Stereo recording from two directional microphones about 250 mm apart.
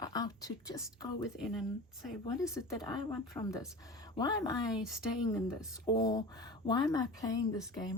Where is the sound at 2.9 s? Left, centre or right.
Centre.